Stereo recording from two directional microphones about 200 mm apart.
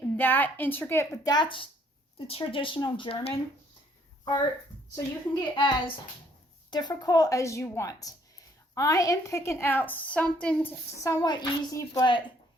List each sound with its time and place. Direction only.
0.2 s a woman's voice: 10° left (ahead or behind); by 3.3 s 25° left (ahead or behind)
4.9 s a woman's voice: 20° left (ahead or behind)